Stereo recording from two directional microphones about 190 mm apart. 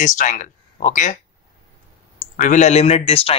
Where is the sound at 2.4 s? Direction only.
40° left (ahead or behind).